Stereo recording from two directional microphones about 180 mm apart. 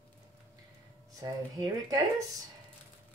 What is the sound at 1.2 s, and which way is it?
Speech, 20° right (ahead or behind).